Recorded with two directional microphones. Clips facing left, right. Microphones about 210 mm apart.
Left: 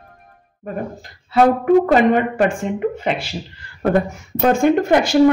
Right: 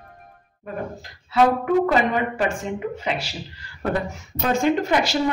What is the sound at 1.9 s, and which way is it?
Speech, 50° left (ahead or behind).